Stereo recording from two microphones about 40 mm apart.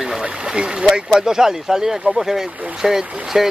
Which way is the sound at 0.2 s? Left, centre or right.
Right.